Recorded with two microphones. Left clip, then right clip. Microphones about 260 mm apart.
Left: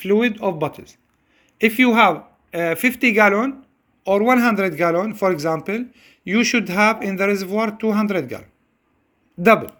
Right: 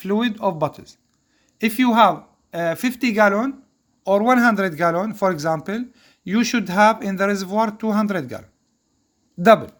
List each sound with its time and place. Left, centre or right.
0.3 s speech: right
2.0 s speech: right
2.6 s a man's voice: right